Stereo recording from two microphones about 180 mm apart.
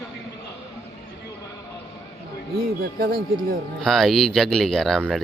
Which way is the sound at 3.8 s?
Centre (ahead or behind).